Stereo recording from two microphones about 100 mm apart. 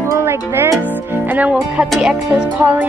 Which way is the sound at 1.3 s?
15° right (ahead or behind).